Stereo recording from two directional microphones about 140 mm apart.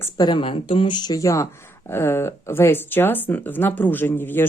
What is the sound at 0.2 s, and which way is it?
Speech, 35° left (ahead or behind).